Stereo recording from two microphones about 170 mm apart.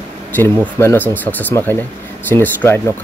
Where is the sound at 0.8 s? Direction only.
15° left (ahead or behind).